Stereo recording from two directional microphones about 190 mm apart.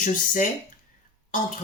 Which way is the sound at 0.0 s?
45° left (ahead or behind).